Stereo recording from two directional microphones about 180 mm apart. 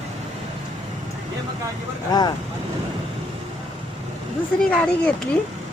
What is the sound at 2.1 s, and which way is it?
Speech, 20° left (ahead or behind).